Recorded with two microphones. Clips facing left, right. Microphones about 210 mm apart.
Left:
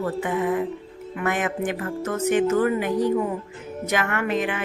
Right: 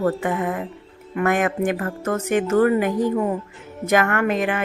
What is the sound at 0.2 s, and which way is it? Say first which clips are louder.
A woman's voice: left 1 dB; 55° right (ahead or behind).